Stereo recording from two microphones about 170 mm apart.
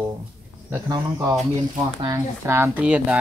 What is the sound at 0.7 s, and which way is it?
Speech, 15° right (ahead or behind).